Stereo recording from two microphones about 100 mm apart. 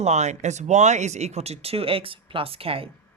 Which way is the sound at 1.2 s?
90° right.